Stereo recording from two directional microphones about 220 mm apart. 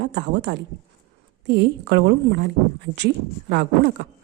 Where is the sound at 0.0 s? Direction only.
50° right (ahead or behind).